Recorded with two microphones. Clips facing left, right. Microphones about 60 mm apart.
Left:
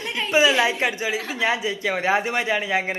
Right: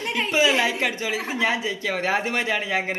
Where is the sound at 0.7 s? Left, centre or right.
Left.